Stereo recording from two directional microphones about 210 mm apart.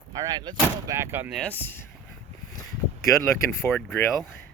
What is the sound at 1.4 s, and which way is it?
Speech, 5° left (ahead or behind).